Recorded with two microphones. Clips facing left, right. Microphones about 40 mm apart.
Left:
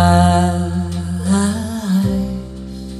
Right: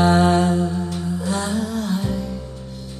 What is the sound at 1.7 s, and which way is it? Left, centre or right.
Music, left.